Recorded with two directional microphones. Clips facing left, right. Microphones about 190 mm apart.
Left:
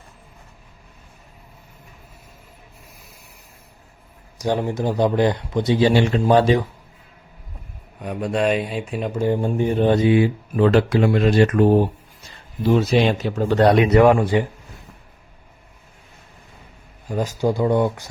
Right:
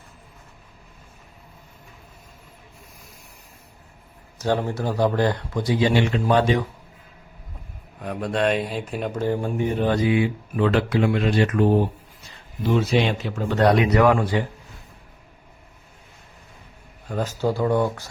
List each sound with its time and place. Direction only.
4.4 s speech: 15° left (ahead or behind); by 6.5 s 35° left (ahead or behind)
8.0 s speech: centre (ahead or behind)
9.2 s speech: 20° left (ahead or behind)
10.2 s speech: 40° left (ahead or behind)
13.1 s speech: 35° left (ahead or behind)
17.1 s speech: 10° left (ahead or behind)